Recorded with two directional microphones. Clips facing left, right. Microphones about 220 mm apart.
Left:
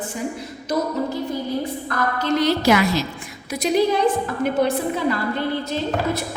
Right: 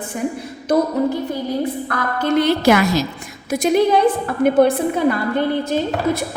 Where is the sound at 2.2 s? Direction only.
55° right (ahead or behind).